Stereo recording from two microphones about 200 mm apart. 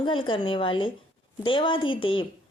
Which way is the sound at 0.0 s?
25° left (ahead or behind).